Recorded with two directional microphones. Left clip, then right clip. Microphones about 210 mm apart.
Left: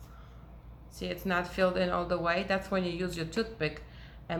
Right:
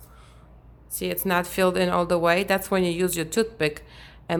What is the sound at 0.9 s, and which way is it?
Speech, 60° right (ahead or behind).